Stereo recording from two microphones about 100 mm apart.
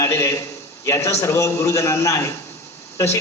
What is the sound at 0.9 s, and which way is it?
Speech, 30° left (ahead or behind).